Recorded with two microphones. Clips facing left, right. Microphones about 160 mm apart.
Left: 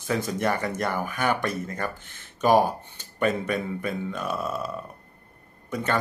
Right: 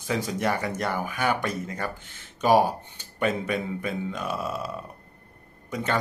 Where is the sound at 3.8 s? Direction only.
15° right (ahead or behind).